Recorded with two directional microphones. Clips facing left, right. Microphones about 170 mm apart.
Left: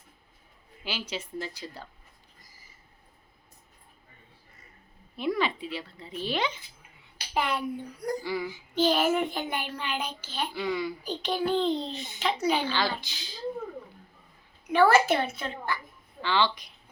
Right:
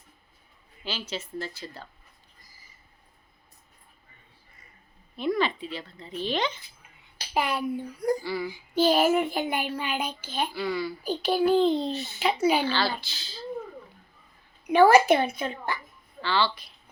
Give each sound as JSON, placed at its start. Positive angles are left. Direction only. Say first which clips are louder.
{"t": 0.9, "sound": "speech", "louder": "right 1 dB", "side_deg": 10}
{"t": 5.1, "sound": "speech", "louder": "right 2 dB", "side_deg": 10}
{"t": 7.3, "sound": "a child's voice", "louder": "right 2 dB", "side_deg": -5}
{"t": 8.2, "sound": "speech", "louder": "right 1 dB", "side_deg": 15}
{"t": 8.4, "sound": "child singing", "louder": "right 3 dB", "side_deg": -10}
{"t": 10.6, "sound": "speech", "louder": "left 2 dB", "side_deg": 15}
{"t": 11.0, "sound": "child singing", "louder": "right 5 dB", "side_deg": -10}
{"t": 12.7, "sound": "speech", "louder": "right 1 dB", "side_deg": 15}
{"t": 14.7, "sound": "child singing", "louder": "right 4 dB", "side_deg": -15}
{"t": 16.2, "sound": "speech", "louder": "even", "side_deg": 15}